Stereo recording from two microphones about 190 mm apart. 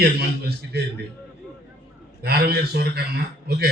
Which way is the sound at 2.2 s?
55° right (ahead or behind).